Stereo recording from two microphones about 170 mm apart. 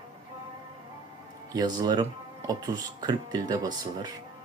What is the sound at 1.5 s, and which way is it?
Speech, 25° right (ahead or behind).